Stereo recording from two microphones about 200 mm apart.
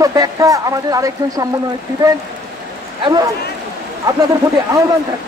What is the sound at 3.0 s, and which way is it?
Speech, 20° right (ahead or behind).